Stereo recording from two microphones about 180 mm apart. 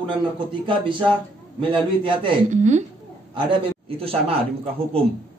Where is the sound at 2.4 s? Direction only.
40° right (ahead or behind).